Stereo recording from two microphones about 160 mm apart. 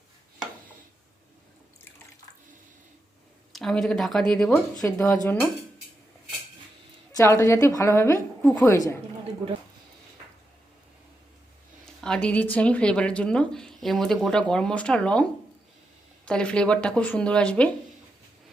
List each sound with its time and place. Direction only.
3.5 s speech: centre (ahead or behind)
4.9 s speech: 20° left (ahead or behind)
5.2 s speech: 5° left (ahead or behind)
7.2 s a woman's voice: 20° left (ahead or behind)
11.9 s speech: 5° left (ahead or behind)